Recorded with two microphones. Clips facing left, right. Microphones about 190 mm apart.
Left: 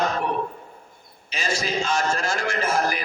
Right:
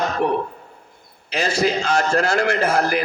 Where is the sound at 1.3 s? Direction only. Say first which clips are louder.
Right 7 dB; 65° right (ahead or behind).